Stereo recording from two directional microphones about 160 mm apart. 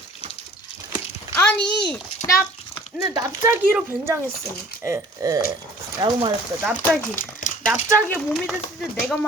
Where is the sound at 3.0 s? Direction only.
20° right (ahead or behind).